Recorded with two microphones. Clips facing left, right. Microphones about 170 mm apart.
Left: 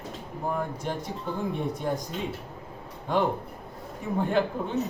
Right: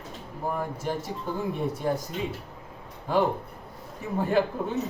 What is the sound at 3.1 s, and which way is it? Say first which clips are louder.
A man's voice: right 1 dB; 5° right (ahead or behind).